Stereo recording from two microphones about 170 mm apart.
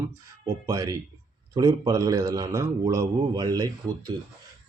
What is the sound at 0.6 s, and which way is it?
Speech, 20° right (ahead or behind).